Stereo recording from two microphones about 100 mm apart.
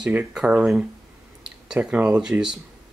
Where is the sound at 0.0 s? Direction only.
10° right (ahead or behind).